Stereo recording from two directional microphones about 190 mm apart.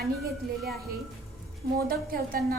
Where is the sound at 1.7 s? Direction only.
50° right (ahead or behind).